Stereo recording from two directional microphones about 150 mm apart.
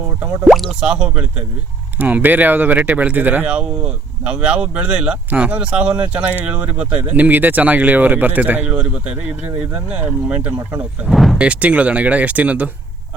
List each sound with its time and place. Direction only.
0.2 s speech: 5° right (ahead or behind)